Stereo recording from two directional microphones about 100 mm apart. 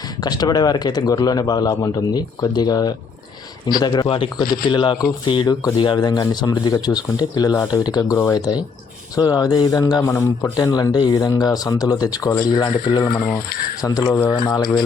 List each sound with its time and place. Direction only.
0.2 s speech: 45° left (ahead or behind); by 10.5 s 25° left (ahead or behind)
10.6 s speech: 40° left (ahead or behind)